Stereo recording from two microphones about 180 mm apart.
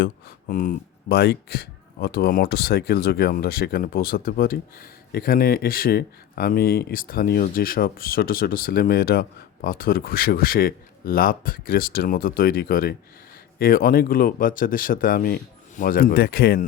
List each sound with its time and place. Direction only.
0.0 s speech: 50° left (ahead or behind)